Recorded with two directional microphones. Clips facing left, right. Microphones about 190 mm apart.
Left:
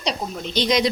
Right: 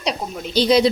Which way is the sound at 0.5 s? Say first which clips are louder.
Right 5 dB; 30° right (ahead or behind).